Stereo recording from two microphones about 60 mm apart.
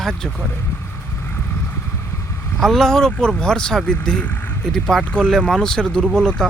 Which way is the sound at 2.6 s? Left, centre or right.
Centre.